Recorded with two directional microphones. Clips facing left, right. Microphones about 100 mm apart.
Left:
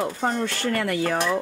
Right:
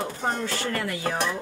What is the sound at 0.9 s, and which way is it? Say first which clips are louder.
Speech: left 5 dB; 55° left (ahead or behind).